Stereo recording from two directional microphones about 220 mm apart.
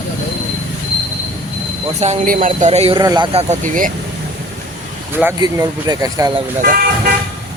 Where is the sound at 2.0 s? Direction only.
30° right (ahead or behind).